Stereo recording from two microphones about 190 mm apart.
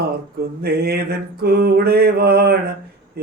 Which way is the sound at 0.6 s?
55° right (ahead or behind).